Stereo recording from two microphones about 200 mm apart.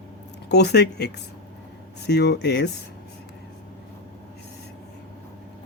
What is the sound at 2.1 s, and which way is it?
Speech, 55° left (ahead or behind).